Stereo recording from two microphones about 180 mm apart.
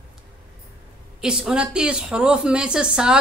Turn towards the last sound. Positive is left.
turn(degrees=-5)  # may be behind; listen again after turning